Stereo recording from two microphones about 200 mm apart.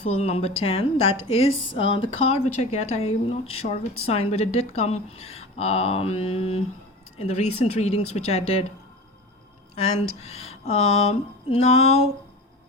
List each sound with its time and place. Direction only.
0.0 s a woman's voice: 30° left (ahead or behind)
9.7 s a woman's voice: 30° left (ahead or behind)